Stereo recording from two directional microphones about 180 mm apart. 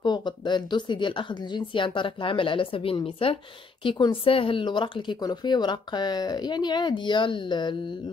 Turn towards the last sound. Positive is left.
turn(degrees=25)  # may be behind; listen again after turning